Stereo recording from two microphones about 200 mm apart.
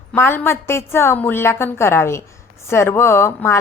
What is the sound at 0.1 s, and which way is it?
Speech, 10° left (ahead or behind).